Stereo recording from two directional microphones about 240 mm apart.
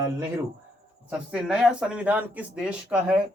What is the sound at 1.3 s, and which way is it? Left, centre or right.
Speech, centre.